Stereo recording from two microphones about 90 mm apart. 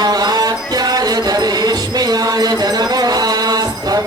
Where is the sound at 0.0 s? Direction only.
50° right (ahead or behind).